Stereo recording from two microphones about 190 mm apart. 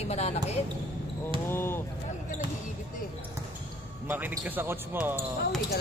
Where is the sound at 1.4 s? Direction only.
10° left (ahead or behind).